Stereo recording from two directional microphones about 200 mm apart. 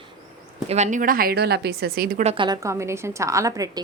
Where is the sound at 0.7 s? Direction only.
35° right (ahead or behind).